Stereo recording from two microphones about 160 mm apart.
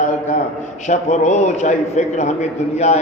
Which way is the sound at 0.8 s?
45° left (ahead or behind).